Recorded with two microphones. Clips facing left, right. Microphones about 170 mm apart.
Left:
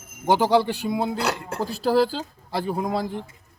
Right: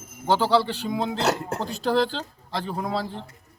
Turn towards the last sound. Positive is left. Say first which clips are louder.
# left 3 dB
turn(degrees=10)  # may be behind; listen again after turning